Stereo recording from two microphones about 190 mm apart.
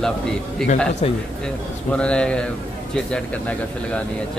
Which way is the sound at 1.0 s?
35° left (ahead or behind).